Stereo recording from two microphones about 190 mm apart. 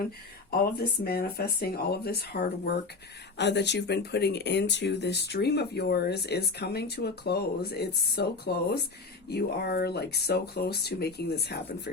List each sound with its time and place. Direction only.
0.6 s speech: 55° left (ahead or behind)